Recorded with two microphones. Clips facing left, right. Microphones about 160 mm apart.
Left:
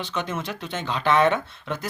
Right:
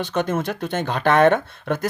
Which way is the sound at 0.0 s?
50° right (ahead or behind).